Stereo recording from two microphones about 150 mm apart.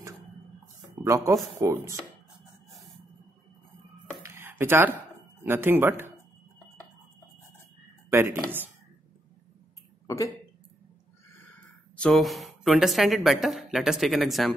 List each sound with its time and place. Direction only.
1.0 s speech: 20° right (ahead or behind)
4.2 s a sound: 15° right (ahead or behind)
5.4 s speech: 15° right (ahead or behind)
8.1 s speech: 15° right (ahead or behind)
10.0 s speech: 20° left (ahead or behind)
12.0 s speech: 5° left (ahead or behind)